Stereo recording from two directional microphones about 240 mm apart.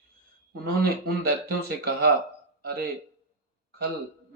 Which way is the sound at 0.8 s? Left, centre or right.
Right.